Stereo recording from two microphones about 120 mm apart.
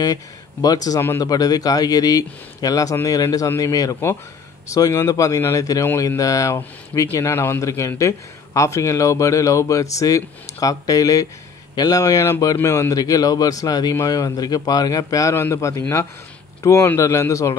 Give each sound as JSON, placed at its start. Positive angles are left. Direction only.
{"t": 0.0, "sound": "a man's voice", "side_deg": 30}